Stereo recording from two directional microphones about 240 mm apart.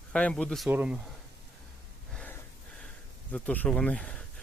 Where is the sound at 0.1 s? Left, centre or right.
Centre.